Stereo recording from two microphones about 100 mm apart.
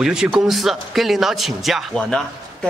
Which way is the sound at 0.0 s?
5° right (ahead or behind).